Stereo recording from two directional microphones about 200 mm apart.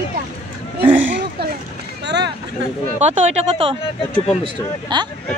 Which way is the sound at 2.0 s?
60° right (ahead or behind).